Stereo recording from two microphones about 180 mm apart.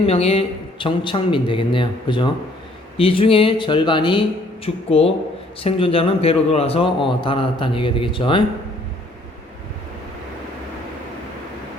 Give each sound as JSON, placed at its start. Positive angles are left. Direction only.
{"t": 0.0, "sound": "speech", "side_deg": 35}